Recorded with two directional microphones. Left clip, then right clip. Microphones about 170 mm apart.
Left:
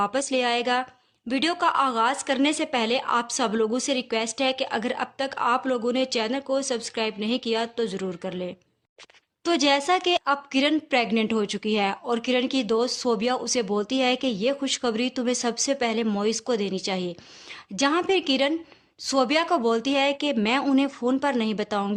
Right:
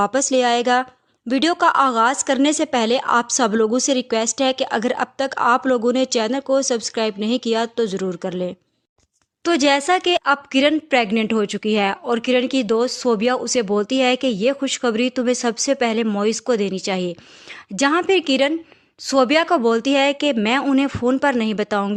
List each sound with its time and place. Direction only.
0.0 s a woman's voice: 35° right (ahead or behind)
9.4 s speech: 25° right (ahead or behind)